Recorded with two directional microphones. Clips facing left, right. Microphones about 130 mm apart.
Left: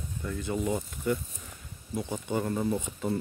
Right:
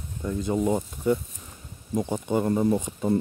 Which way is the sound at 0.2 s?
20° right (ahead or behind).